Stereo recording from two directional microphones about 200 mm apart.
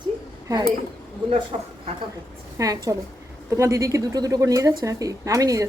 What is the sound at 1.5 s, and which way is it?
Speech, 30° right (ahead or behind).